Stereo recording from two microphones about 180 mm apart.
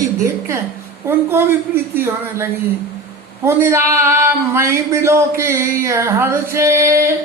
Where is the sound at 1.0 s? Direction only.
15° right (ahead or behind).